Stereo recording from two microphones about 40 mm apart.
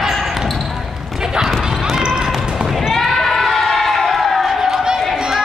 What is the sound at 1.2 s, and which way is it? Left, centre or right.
Clip-clop, centre.